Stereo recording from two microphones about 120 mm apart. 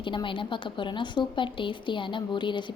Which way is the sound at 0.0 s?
45° left (ahead or behind).